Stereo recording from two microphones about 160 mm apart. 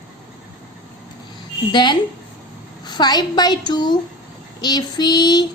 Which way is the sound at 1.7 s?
30° left (ahead or behind).